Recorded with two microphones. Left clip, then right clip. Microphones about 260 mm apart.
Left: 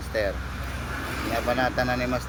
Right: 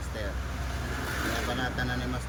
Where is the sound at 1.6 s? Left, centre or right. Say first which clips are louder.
Left 7 dB; centre.